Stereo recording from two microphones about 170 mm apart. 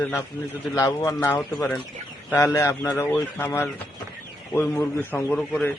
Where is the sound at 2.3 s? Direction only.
15° left (ahead or behind).